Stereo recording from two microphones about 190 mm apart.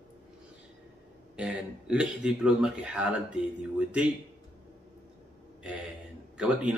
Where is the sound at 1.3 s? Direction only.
5° right (ahead or behind).